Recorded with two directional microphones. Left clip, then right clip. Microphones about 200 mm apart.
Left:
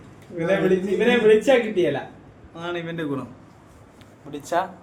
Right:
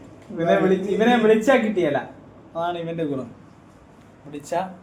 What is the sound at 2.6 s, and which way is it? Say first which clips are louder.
Speech: right 4 dB; 25° left (ahead or behind).